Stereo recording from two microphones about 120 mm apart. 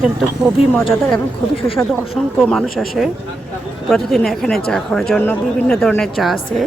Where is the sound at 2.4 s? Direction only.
Centre (ahead or behind).